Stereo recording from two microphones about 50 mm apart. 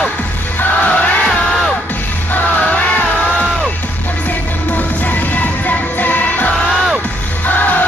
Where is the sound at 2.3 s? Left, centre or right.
Left.